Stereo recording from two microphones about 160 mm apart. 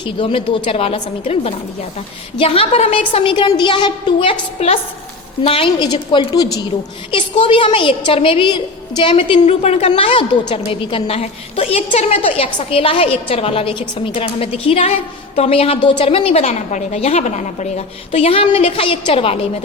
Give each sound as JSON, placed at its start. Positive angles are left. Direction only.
{"t": 0.0, "sound": "a woman's voice", "side_deg": 35}